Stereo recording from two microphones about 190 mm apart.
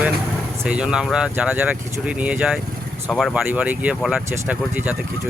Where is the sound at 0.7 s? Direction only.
5° right (ahead or behind).